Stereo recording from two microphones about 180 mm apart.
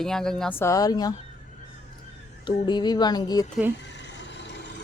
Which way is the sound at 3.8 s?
80° left.